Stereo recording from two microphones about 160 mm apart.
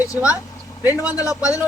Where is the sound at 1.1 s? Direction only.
20° left (ahead or behind).